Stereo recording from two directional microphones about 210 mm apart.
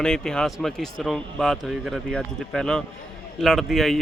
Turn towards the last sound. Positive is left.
turn(degrees=0)  # may be behind; listen again after turning